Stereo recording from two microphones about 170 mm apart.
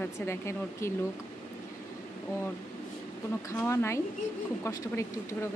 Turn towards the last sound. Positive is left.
turn(degrees=15)  # may be behind; listen again after turning